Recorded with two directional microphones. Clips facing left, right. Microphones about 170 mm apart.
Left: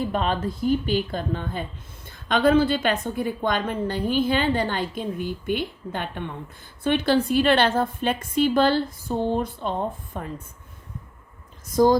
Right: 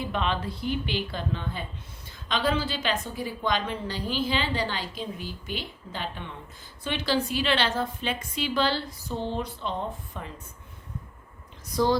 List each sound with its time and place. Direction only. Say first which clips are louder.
0.0 s a woman's voice: left 4 dB; 45° left (ahead or behind)
11.7 s a woman's voice: left 6 dB; 45° left (ahead or behind)